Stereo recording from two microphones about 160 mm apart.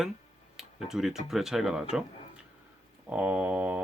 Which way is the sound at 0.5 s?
Centre (ahead or behind).